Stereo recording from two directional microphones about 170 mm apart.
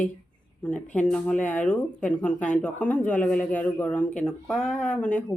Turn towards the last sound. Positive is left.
turn(degrees=5)  # may be behind; listen again after turning